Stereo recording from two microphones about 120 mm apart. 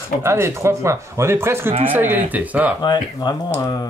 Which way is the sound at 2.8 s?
35° left (ahead or behind).